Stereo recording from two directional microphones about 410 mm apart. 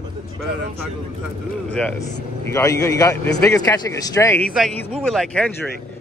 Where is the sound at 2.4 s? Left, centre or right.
Centre.